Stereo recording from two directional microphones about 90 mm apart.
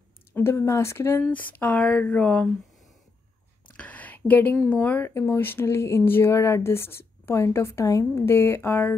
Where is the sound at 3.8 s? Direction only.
15° left (ahead or behind).